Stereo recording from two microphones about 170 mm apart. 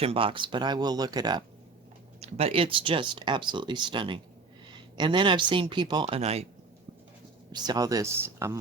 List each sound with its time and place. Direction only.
0.0 s speech: 35° right (ahead or behind)
2.2 s speech: 35° right (ahead or behind)
7.5 s speech: 25° right (ahead or behind)